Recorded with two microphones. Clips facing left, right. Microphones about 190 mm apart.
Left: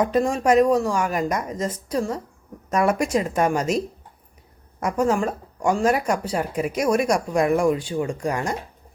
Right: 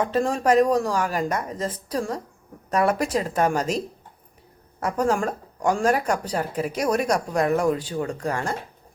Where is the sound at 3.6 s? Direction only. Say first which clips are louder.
Left 3 dB; 35° right (ahead or behind).